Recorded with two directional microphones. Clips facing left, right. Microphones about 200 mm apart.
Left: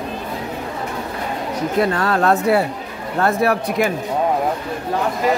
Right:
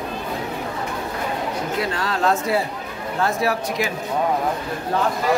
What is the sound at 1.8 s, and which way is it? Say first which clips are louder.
Speech: left 8 dB; 55° left (ahead or behind).